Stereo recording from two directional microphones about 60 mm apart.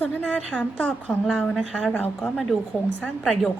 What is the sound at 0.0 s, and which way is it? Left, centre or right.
A woman's voice, left.